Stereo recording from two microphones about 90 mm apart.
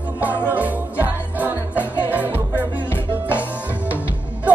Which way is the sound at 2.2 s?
25° left (ahead or behind).